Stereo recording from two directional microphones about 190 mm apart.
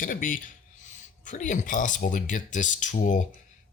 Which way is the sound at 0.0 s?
45° left (ahead or behind).